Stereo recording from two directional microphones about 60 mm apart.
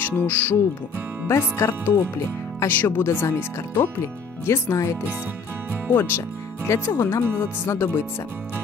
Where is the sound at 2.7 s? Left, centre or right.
Left.